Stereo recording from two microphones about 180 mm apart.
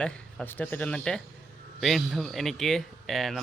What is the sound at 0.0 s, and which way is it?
Speech, 5° left (ahead or behind).